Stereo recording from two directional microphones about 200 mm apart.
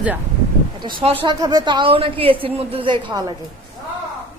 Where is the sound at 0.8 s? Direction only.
25° right (ahead or behind).